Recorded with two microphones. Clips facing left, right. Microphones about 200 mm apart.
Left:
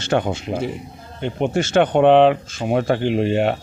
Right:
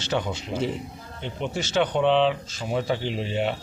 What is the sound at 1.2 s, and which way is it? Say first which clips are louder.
Speech: left 9 dB; 55° left (ahead or behind).